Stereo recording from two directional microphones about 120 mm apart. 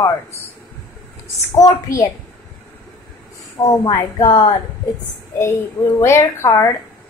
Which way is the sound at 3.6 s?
35° left (ahead or behind).